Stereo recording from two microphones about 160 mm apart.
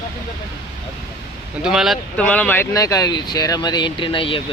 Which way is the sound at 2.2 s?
10° left (ahead or behind).